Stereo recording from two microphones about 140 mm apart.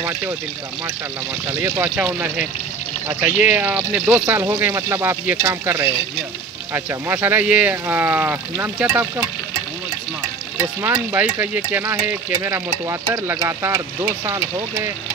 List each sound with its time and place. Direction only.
1.5 s speech: 15° right (ahead or behind)
11.1 s speech: 15° right (ahead or behind)